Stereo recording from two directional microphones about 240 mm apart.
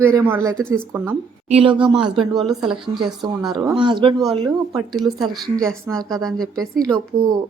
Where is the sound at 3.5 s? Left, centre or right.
Centre.